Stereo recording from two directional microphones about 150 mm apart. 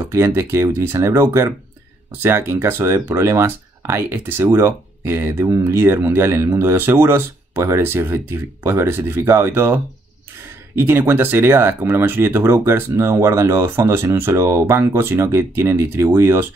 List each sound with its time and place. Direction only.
0.0 s speech: 20° right (ahead or behind)
10.8 s speech: 15° right (ahead or behind)